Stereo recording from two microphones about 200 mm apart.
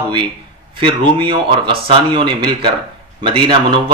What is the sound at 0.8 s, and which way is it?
Speech, 25° right (ahead or behind).